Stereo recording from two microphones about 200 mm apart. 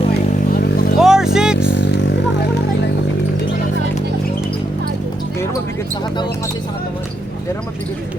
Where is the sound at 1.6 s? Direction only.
60° left (ahead or behind).